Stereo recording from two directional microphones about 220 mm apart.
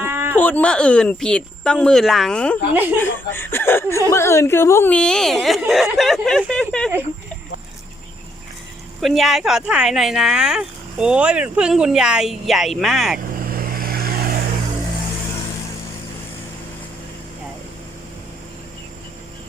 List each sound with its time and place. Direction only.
0.0 s a sound: 10° right (ahead or behind)
0.3 s speech: 5° left (ahead or behind)
2.7 s speech: 10° right (ahead or behind)
3.0 s speech: 10° left (ahead or behind)
9.0 s speech: centre (ahead or behind)
13.4 s vehicle: 40° right (ahead or behind)